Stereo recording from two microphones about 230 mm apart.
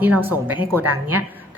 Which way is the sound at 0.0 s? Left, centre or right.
Centre.